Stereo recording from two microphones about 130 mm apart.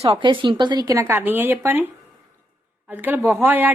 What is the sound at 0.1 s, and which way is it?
Speech, 40° right (ahead or behind).